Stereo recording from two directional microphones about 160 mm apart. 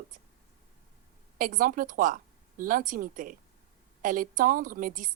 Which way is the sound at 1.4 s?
60° right (ahead or behind).